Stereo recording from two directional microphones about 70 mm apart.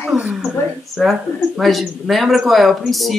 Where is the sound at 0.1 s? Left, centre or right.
Centre.